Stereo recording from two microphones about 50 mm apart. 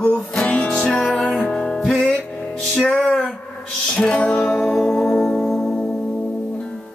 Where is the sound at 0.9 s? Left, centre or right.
Centre.